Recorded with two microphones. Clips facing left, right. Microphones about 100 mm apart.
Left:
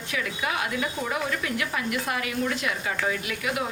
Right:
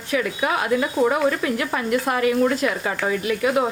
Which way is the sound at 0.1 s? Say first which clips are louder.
Right 7 dB; 40° right (ahead or behind).